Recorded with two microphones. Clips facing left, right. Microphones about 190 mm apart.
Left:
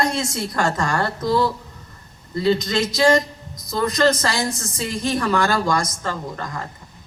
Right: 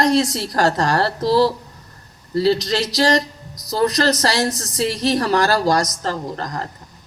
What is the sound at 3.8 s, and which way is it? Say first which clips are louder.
Speech: right 1 dB; 75° right (ahead or behind).